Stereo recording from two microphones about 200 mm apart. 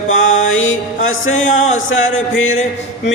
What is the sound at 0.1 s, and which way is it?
Music, 75° left (ahead or behind).